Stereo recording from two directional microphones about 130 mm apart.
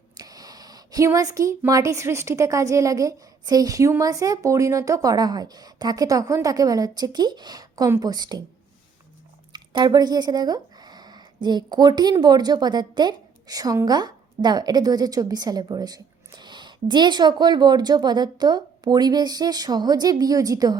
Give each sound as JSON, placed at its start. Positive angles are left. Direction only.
{"t": 0.2, "sound": "speech", "side_deg": -30}
{"t": 9.5, "sound": "a woman's voice", "side_deg": -35}